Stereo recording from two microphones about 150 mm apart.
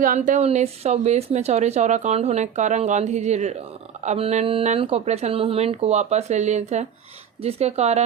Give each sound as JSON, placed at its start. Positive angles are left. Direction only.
{"t": 0.0, "sound": "speech", "side_deg": -60}